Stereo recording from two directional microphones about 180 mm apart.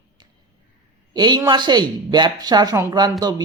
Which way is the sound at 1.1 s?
25° right (ahead or behind).